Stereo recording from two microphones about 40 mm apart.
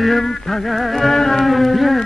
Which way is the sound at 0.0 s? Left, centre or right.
Centre.